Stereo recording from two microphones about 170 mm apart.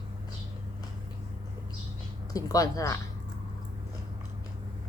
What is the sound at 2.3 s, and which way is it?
Speech, 20° left (ahead or behind).